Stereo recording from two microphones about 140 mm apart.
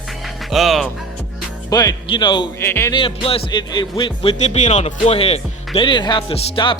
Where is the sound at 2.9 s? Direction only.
40° left (ahead or behind).